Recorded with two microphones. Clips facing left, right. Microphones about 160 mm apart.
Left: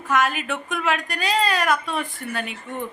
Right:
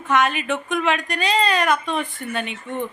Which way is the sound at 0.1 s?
Centre (ahead or behind).